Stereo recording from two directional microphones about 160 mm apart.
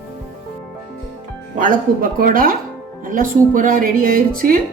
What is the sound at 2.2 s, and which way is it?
Speech, 60° right (ahead or behind).